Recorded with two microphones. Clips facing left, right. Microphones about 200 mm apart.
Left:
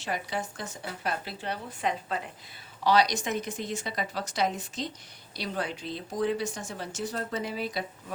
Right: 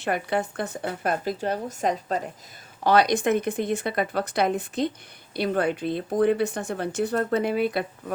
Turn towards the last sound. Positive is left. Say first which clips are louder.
# right 9 dB
turn(degrees=-60)  # may be behind; listen again after turning